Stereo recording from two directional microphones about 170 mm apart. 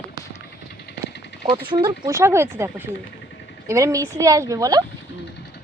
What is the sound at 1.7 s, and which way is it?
Speech, 30° right (ahead or behind).